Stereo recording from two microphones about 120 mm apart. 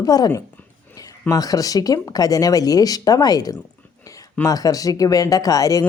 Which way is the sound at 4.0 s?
30° left (ahead or behind).